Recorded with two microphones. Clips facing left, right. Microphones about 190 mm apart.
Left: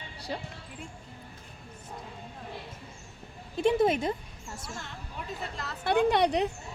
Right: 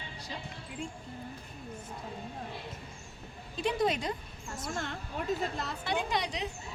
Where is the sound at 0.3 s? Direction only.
50° left (ahead or behind).